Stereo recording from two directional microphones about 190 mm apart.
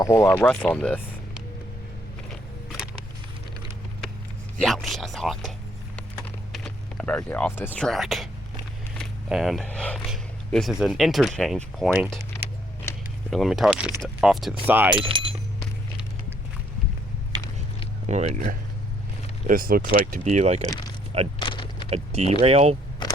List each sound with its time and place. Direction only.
0.0 s speech: 15° left (ahead or behind)
4.6 s speech: centre (ahead or behind)
13.3 s speech: centre (ahead or behind)
14.9 s speech: 25° right (ahead or behind)
17.3 s a sound: 20° right (ahead or behind)
18.0 s speech: 35° right (ahead or behind)
21.3 s a sound: 25° left (ahead or behind)
21.8 s speech: 35° right (ahead or behind)